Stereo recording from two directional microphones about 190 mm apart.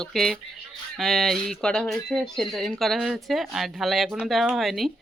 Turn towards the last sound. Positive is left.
turn(degrees=0)  # may be behind; listen again after turning